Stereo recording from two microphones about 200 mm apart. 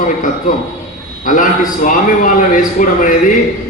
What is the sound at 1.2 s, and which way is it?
A man's voice, 40° left (ahead or behind).